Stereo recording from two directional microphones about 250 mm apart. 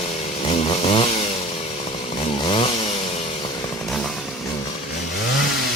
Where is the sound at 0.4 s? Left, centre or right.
Left.